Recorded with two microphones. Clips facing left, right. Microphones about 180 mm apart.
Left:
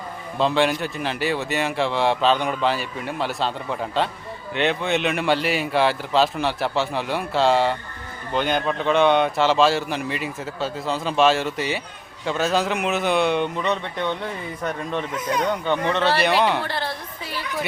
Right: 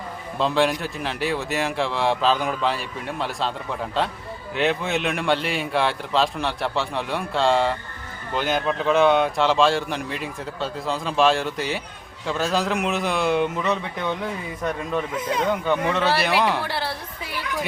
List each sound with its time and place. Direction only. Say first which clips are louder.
0.3 s speech: left 1 dB; centre (ahead or behind)
15.1 s speech: even; 25° right (ahead or behind)
15.4 s a man's voice: right 2 dB; 5° right (ahead or behind)